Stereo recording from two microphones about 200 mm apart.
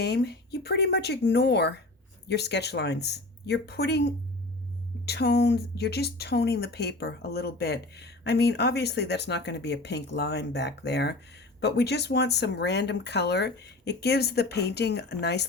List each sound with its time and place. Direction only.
0.0 s speech: 55° left (ahead or behind)